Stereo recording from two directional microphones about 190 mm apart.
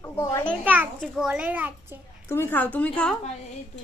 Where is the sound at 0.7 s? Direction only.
5° right (ahead or behind).